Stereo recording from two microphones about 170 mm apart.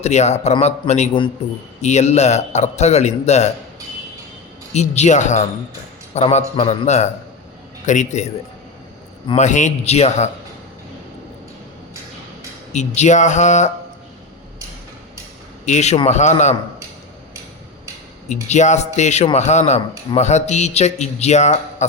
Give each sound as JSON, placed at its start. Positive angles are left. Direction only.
{"t": 0.0, "sound": "a man's voice", "side_deg": 40}
{"t": 4.7, "sound": "a man's voice", "side_deg": 40}
{"t": 9.4, "sound": "a man's voice", "side_deg": 45}
{"t": 12.7, "sound": "speech", "side_deg": 45}
{"t": 15.6, "sound": "a man's voice", "side_deg": 40}
{"t": 18.4, "sound": "a man's voice", "side_deg": 45}